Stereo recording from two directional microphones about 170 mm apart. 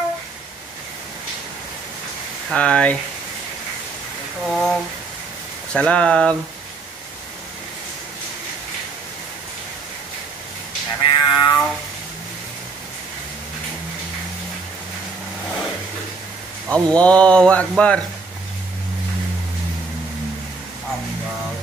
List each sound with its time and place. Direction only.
2.5 s speech: 5° left (ahead or behind)
4.5 s speech: centre (ahead or behind)
11.0 s music: 20° left (ahead or behind)
16.7 s speech: 5° left (ahead or behind)